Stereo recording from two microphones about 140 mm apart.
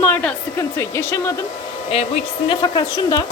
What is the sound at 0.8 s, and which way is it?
Speech, 20° left (ahead or behind).